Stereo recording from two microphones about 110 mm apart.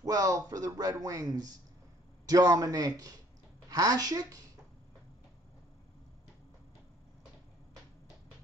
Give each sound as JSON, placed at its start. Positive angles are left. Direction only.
{"t": 0.0, "sound": "speech", "side_deg": -30}